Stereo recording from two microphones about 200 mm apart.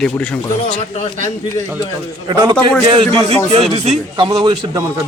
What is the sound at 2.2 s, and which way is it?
Speech, 20° right (ahead or behind).